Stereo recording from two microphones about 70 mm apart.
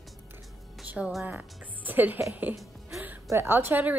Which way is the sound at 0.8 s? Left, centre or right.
Centre.